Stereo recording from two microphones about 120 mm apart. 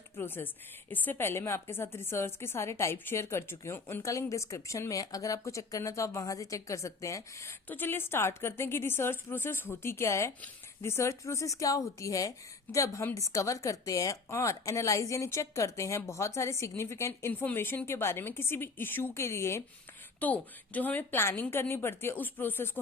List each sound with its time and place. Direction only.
0.2 s a woman's voice: 15° left (ahead or behind)